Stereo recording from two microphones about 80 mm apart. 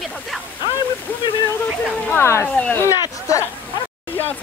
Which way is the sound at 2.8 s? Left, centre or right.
Left.